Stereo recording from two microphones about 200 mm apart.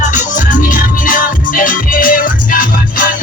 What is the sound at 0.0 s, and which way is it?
Music, 40° left (ahead or behind).